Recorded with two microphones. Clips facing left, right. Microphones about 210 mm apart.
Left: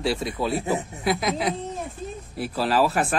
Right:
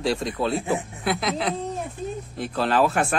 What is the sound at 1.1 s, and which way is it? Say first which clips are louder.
Speech: left 1 dB; 10° left (ahead or behind).